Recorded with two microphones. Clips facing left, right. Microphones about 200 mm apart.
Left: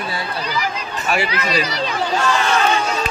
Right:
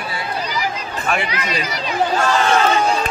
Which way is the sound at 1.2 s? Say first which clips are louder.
Left 3 dB; 35° left (ahead or behind).